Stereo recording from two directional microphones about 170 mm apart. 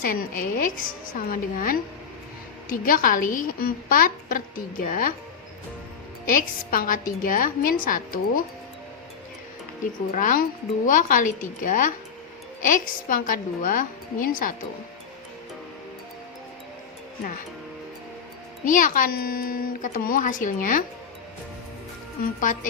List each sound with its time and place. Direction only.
0.0 s a woman's voice: 55° left (ahead or behind)
6.2 s a woman's voice: 55° left (ahead or behind)
10.2 s speech: 50° left (ahead or behind)
18.6 s speech: 55° left (ahead or behind)
22.2 s speech: 50° left (ahead or behind)